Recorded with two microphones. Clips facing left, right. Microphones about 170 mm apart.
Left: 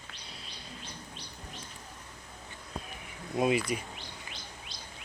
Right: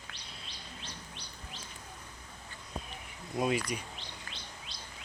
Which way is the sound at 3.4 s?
5° left (ahead or behind).